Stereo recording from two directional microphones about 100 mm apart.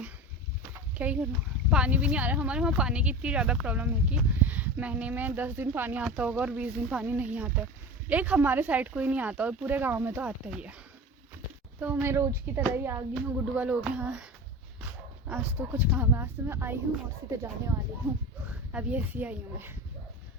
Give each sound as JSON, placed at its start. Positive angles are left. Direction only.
{"t": 0.7, "sound": "a sound", "side_deg": -15}
{"t": 1.7, "sound": "speech", "side_deg": -10}
{"t": 11.8, "sound": "speech", "side_deg": -20}
{"t": 13.4, "sound": "speech", "side_deg": -15}
{"t": 15.3, "sound": "speech", "side_deg": -15}
{"t": 18.7, "sound": "speech", "side_deg": -15}